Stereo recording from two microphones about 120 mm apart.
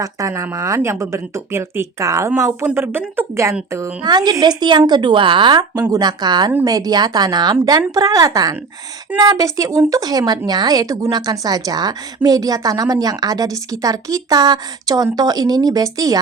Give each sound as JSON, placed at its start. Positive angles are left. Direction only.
{"t": 0.0, "sound": "speech", "side_deg": -25}
{"t": 4.0, "sound": "speech", "side_deg": -35}